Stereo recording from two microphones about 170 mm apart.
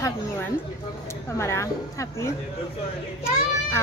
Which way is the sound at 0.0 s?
15° left (ahead or behind).